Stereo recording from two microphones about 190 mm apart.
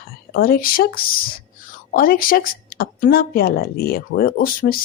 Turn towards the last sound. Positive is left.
turn(degrees=50)  # may be behind; listen again after turning